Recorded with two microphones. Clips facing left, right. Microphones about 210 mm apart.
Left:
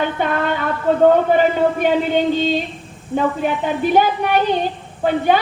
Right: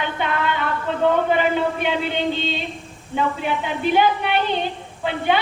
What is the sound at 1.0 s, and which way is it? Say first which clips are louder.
A woman's voice: left 5 dB; 45° left (ahead or behind).